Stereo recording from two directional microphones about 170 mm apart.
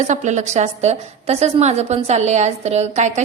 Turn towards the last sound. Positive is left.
turn(degrees=-45)  # may be behind; listen again after turning